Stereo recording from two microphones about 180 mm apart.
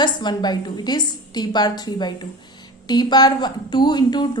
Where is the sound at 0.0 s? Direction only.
25° left (ahead or behind).